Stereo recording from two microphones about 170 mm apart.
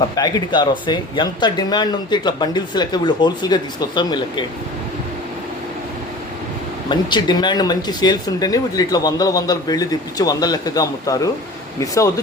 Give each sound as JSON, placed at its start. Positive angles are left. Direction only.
{"t": 0.2, "sound": "speech", "side_deg": 25}
{"t": 6.9, "sound": "speech", "side_deg": 25}